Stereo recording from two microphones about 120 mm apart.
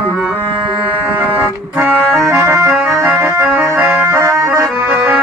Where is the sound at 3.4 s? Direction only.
10° right (ahead or behind).